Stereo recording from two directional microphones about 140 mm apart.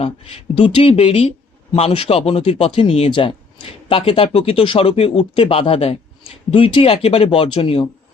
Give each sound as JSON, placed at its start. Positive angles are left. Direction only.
{"t": 0.0, "sound": "speech", "side_deg": 40}